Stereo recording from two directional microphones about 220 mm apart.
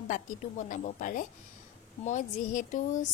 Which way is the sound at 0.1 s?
35° left (ahead or behind).